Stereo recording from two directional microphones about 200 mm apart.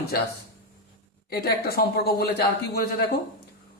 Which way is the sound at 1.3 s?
50° left (ahead or behind).